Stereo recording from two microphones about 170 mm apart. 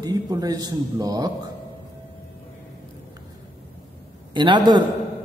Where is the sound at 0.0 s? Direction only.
20° right (ahead or behind).